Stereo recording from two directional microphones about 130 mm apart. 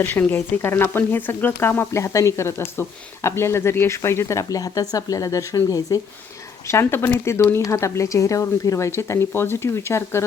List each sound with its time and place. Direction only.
0.0 s speech: 15° left (ahead or behind)